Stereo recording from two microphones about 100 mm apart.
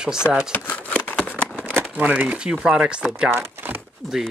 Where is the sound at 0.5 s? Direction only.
15° left (ahead or behind).